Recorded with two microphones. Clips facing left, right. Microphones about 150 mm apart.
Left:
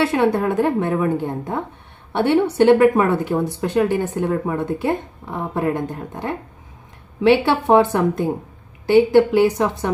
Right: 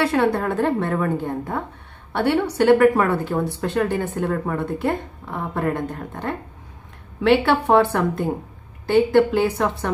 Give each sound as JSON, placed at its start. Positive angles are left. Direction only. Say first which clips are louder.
{"t": 0.0, "sound": "speech", "louder": "left 2 dB", "side_deg": 20}